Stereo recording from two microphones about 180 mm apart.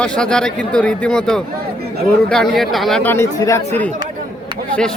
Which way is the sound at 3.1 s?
15° left (ahead or behind).